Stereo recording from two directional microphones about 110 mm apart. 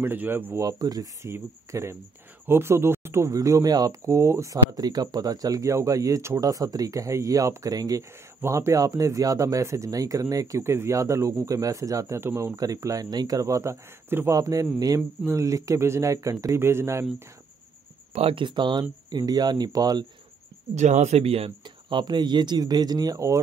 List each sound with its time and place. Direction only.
0.0 s speech: 20° right (ahead or behind)
0.6 s speech: 35° right (ahead or behind)
1.2 s speech: 25° right (ahead or behind)
18.1 s speech: 55° right (ahead or behind); by 20.1 s 35° right (ahead or behind)
20.7 s speech: 90° right; by 21.5 s 65° right (ahead or behind)
21.6 s speech: 45° right (ahead or behind); by 23.4 s 30° right (ahead or behind)